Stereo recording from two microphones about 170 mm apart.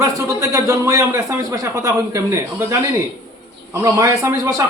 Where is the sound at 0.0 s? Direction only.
20° right (ahead or behind).